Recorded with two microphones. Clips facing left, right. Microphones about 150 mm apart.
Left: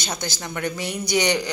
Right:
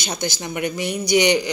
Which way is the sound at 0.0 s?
15° right (ahead or behind).